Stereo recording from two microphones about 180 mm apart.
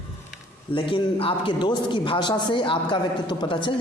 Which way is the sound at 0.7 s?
30° left (ahead or behind).